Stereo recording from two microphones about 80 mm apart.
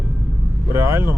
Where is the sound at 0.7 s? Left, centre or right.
Right.